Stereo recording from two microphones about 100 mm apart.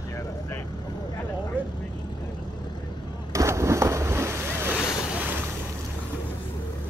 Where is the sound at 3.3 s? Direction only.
30° right (ahead or behind).